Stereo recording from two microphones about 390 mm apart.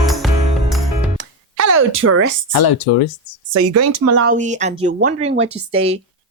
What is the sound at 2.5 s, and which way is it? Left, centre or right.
Speech, left.